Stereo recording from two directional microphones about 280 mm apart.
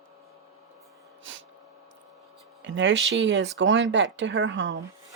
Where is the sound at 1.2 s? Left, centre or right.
Right.